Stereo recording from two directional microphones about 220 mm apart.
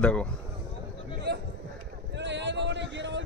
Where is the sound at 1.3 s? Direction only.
50° right (ahead or behind).